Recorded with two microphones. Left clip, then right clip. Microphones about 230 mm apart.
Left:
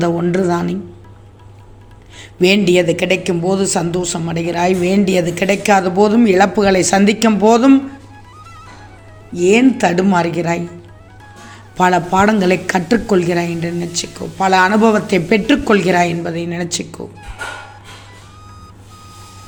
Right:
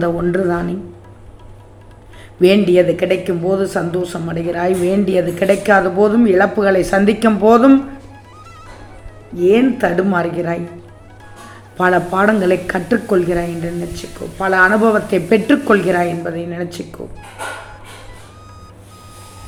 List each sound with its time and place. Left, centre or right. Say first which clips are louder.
0.0 s speech: even; left
2.4 s speech: right 1 dB; left
9.3 s speech: left 1 dB; left
11.8 s speech: left 1 dB; left